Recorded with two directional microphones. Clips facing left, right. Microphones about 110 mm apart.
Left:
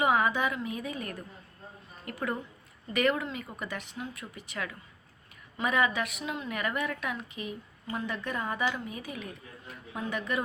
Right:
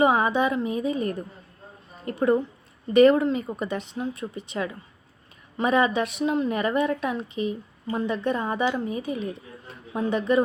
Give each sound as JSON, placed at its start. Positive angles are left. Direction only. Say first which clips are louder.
{"t": 0.0, "sound": "speech", "louder": "right 6 dB", "side_deg": -25}